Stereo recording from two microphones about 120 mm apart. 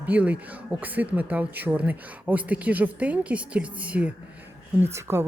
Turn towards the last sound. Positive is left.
turn(degrees=-20)  # may be behind; listen again after turning